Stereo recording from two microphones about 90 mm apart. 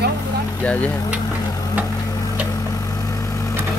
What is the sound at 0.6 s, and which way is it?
Speech, 15° left (ahead or behind).